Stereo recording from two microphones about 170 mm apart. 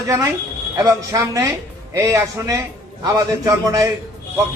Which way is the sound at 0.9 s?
20° right (ahead or behind).